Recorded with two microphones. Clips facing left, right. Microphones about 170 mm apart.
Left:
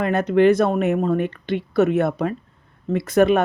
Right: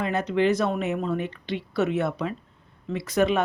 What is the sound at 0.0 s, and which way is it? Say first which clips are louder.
Speech: left 7 dB; 55° left (ahead or behind).